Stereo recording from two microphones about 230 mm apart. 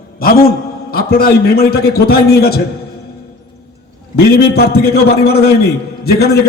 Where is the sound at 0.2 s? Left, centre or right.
Left.